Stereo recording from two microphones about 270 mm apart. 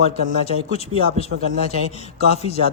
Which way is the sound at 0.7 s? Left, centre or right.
Left.